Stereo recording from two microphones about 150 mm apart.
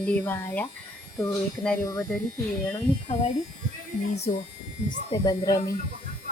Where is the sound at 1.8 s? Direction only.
25° left (ahead or behind).